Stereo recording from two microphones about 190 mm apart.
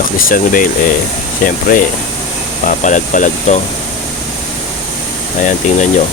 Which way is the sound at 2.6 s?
40° left (ahead or behind).